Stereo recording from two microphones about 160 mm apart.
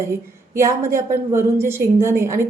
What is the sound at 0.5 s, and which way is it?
A woman's voice, 15° right (ahead or behind).